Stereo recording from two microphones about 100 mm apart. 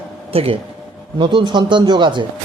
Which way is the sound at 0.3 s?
80° right.